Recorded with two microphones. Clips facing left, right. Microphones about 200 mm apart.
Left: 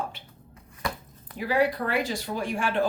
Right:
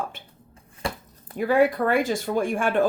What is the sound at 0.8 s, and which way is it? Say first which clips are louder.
Chopping: right 2 dB; 30° right (ahead or behind).